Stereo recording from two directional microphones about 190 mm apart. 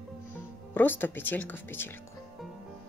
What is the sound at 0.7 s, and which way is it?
Speech, 10° left (ahead or behind).